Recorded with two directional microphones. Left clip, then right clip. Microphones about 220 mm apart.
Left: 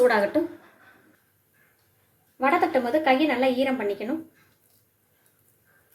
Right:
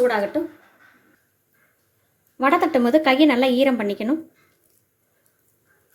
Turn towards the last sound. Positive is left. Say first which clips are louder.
# right 5 dB
turn(degrees=-45)  # may be behind; listen again after turning